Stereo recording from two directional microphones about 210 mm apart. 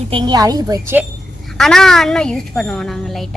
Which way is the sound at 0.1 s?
20° right (ahead or behind).